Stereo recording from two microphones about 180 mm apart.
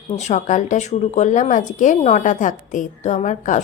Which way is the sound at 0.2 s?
40° left (ahead or behind).